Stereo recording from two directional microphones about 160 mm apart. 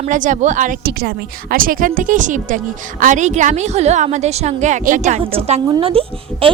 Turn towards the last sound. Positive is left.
turn(degrees=-35)  # may be behind; listen again after turning